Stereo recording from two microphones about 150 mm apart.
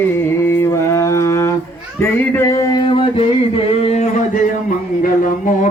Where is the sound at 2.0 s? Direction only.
15° left (ahead or behind); by 4.4 s 45° left (ahead or behind).